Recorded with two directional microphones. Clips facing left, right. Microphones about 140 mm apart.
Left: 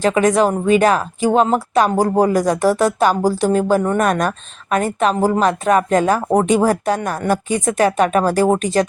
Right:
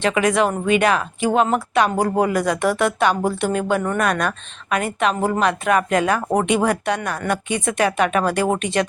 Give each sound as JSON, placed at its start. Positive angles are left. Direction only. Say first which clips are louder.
{"t": 0.0, "sound": "speech", "louder": "left 4 dB", "side_deg": 40}